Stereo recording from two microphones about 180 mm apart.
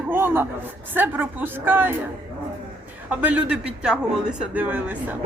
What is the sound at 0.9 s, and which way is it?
A woman's voice, 10° right (ahead or behind).